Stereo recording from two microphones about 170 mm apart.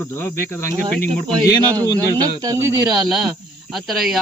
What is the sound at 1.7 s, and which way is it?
Speech, 20° right (ahead or behind).